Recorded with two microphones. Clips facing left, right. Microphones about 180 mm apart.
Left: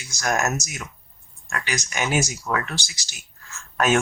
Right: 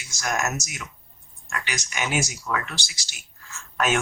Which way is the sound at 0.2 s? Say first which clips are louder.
Left 3 dB; 40° left (ahead or behind).